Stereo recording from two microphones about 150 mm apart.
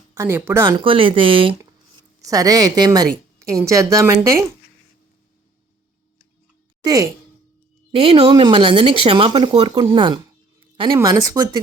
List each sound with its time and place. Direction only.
0.1 s speech: 15° right (ahead or behind); by 1.5 s 35° right (ahead or behind)
2.2 s a woman's voice: 25° right (ahead or behind)
6.8 s a woman's voice: 25° right (ahead or behind)
7.9 s speech: 40° right (ahead or behind)
10.6 s a sound: 35° right (ahead or behind)
10.9 s a woman's voice: 25° right (ahead or behind)